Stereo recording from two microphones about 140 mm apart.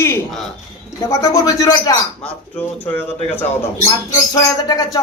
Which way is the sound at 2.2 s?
10° left (ahead or behind).